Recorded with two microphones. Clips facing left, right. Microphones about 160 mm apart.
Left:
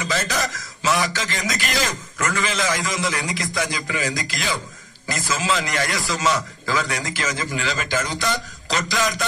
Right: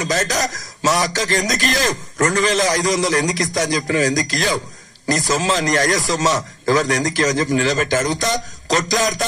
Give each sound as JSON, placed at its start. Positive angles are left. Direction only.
{"t": 0.0, "sound": "a man's voice", "side_deg": -40}